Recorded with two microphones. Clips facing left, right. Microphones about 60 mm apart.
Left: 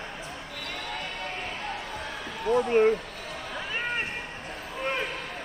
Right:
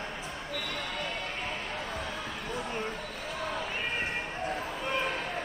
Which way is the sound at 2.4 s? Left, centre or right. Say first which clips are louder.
Left 16 dB; left.